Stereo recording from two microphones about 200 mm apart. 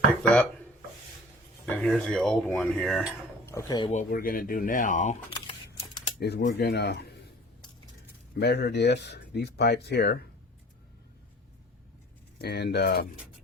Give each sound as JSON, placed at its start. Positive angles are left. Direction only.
{"t": 0.2, "sound": "dishes", "side_deg": 5}
{"t": 1.6, "sound": "mechanisms", "side_deg": 5}
{"t": 3.4, "sound": "speech", "side_deg": 15}
{"t": 3.9, "sound": "speech", "side_deg": 45}
{"t": 5.3, "sound": "camera", "side_deg": 25}
{"t": 6.1, "sound": "speech", "side_deg": 50}
{"t": 8.4, "sound": "speech", "side_deg": 55}
{"t": 12.4, "sound": "speech", "side_deg": 55}